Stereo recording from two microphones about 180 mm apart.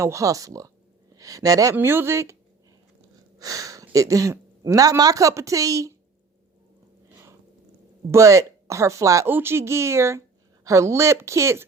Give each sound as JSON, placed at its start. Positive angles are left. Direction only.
{"t": 0.0, "sound": "speech", "side_deg": -15}
{"t": 3.3, "sound": "speech", "side_deg": -20}
{"t": 8.1, "sound": "speech", "side_deg": -15}